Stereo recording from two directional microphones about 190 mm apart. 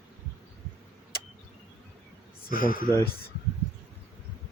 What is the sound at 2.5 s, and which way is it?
Speech, 50° left (ahead or behind).